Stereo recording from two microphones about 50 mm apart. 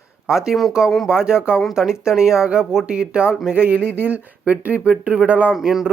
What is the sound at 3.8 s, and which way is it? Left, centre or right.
Speech, left.